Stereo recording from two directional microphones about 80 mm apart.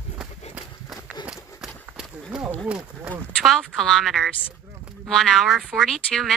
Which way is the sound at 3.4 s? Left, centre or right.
Centre.